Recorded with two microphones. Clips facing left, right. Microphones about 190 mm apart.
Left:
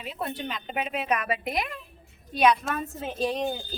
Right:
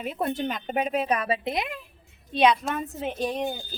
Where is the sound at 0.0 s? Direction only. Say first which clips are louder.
Right 5 dB; 50° right (ahead or behind).